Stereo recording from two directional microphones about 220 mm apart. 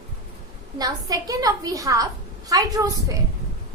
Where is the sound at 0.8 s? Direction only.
15° right (ahead or behind).